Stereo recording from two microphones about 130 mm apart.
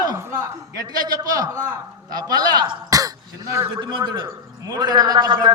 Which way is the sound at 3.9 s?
35° right (ahead or behind).